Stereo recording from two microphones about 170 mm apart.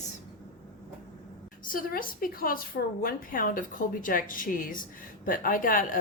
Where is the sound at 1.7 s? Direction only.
55° left (ahead or behind).